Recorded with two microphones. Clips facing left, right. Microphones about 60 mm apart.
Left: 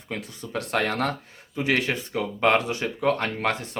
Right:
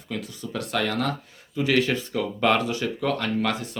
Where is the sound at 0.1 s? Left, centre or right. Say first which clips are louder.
Even; left.